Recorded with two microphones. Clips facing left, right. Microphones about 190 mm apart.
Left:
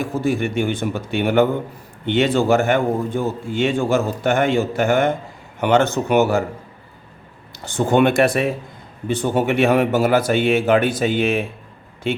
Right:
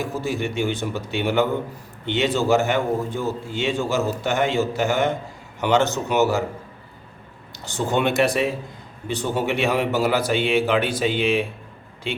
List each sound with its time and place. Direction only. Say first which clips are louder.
0.0 s a man's voice: left 5 dB; 55° left (ahead or behind)
7.6 s a man's voice: left 6 dB; 55° left (ahead or behind)